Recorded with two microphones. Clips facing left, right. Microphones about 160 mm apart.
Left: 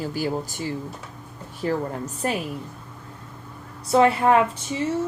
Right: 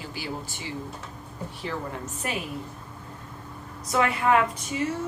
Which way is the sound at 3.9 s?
35° left (ahead or behind).